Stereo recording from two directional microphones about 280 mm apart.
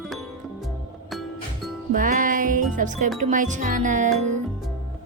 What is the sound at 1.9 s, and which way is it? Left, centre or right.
Music, right.